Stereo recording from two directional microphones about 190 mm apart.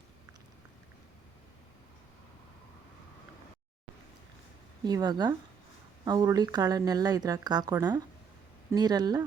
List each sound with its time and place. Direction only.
4.9 s speech: 20° right (ahead or behind)